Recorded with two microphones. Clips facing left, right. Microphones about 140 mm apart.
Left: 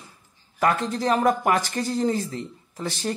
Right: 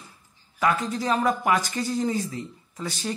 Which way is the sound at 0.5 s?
50° left (ahead or behind).